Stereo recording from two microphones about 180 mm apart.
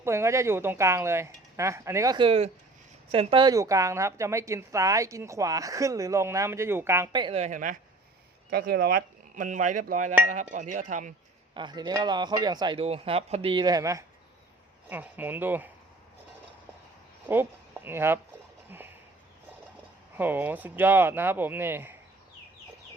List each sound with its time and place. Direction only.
0.0 s a woman's voice: 15° right (ahead or behind); by 7.8 s 45° right (ahead or behind)
8.4 s a sound: 60° right (ahead or behind); by 11.1 s 45° right (ahead or behind)
11.5 s a woman's voice: 25° right (ahead or behind)
17.2 s speech: 10° right (ahead or behind)
18.7 s a sound: 10° right (ahead or behind)
20.1 s a woman's voice: 10° right (ahead or behind)